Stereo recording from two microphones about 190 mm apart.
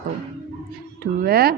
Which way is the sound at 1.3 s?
55° right (ahead or behind).